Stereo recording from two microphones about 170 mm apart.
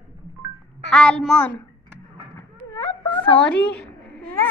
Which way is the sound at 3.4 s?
5° left (ahead or behind).